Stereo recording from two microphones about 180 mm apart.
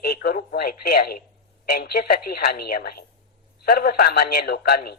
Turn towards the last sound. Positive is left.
turn(degrees=60)  # may be behind; listen again after turning